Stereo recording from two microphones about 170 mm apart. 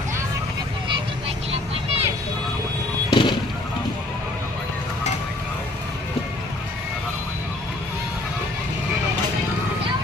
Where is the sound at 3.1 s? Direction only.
25° left (ahead or behind).